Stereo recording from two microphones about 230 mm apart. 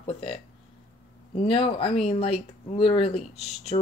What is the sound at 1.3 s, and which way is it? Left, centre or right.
Speech, left.